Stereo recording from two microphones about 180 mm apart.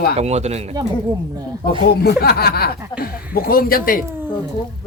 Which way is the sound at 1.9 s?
60° left (ahead or behind).